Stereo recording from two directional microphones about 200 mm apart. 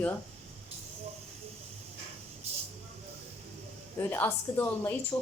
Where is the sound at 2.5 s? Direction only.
30° right (ahead or behind).